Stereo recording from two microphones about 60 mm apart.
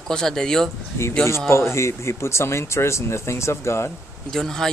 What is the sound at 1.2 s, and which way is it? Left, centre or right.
Speech, left.